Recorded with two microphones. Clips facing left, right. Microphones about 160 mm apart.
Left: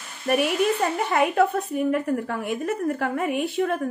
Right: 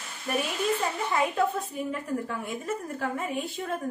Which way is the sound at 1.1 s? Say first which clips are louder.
Left 6 dB; 70° left (ahead or behind).